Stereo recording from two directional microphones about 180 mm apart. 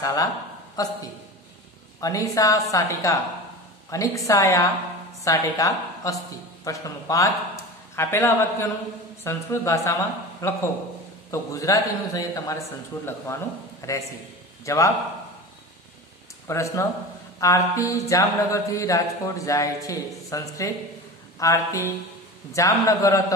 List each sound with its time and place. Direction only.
0.0 s a man's voice: 20° left (ahead or behind)
2.0 s a man's voice: 20° left (ahead or behind)
16.4 s speech: 15° left (ahead or behind)